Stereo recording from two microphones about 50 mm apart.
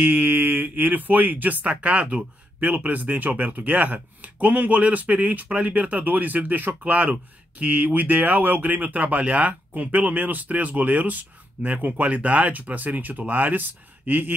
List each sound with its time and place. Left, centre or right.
0.0 s speech: right